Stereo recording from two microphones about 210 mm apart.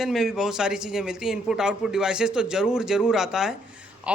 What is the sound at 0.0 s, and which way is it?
A man's voice, centre (ahead or behind).